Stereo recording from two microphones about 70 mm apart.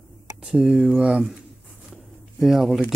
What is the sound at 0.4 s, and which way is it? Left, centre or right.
Speech, centre.